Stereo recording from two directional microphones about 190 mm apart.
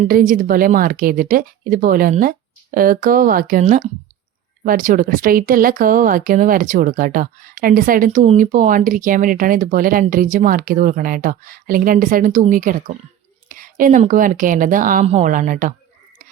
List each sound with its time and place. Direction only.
0.0 s speech: 45° right (ahead or behind)